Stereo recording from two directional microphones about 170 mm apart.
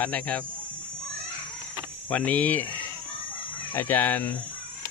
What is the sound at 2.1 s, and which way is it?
Speech, 10° left (ahead or behind).